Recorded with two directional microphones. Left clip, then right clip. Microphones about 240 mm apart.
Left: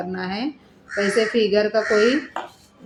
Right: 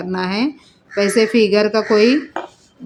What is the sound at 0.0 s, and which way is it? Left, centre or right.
Speech, right.